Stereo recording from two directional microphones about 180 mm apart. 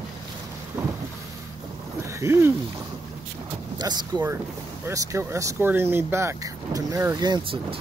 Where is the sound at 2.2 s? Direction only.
15° right (ahead or behind).